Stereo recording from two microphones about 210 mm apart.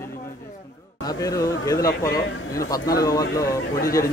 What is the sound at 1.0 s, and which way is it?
A man's voice, 15° left (ahead or behind).